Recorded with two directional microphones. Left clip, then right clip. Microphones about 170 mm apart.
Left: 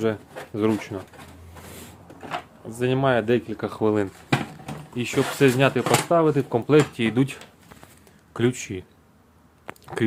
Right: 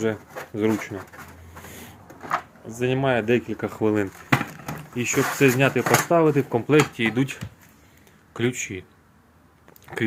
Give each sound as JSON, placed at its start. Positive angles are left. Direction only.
{"t": 0.0, "sound": "speech", "side_deg": 10}
{"t": 2.7, "sound": "speech", "side_deg": 10}
{"t": 3.4, "sound": "speech", "side_deg": -5}
{"t": 6.1, "sound": "speech", "side_deg": -10}
{"t": 6.6, "sound": "speech", "side_deg": 5}
{"t": 9.8, "sound": "a sound", "side_deg": 15}